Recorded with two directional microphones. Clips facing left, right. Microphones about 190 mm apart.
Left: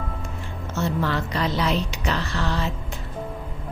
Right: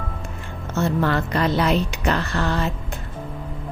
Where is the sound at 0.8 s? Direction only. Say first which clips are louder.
Right 4 dB; 55° right (ahead or behind).